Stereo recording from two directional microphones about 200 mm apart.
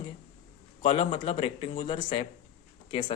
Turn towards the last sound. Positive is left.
turn(degrees=25)  # may be behind; listen again after turning